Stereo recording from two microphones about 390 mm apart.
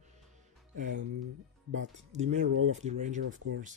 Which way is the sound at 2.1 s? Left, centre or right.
Centre.